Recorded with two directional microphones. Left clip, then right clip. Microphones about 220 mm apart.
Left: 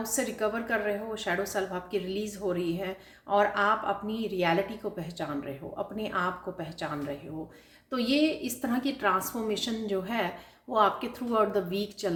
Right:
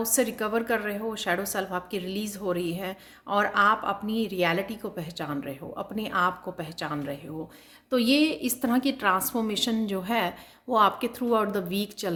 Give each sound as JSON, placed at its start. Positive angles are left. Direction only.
{"t": 0.0, "sound": "a woman's voice", "side_deg": -45}